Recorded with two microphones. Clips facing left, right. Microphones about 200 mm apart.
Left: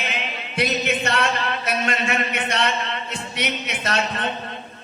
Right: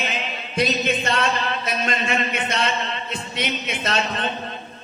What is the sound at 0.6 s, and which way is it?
Singing, 65° left (ahead or behind).